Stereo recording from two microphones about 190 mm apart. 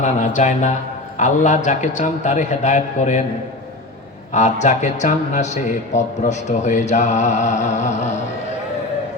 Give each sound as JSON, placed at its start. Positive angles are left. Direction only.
{"t": 0.0, "sound": "speech", "side_deg": 40}
{"t": 4.4, "sound": "speech", "side_deg": 40}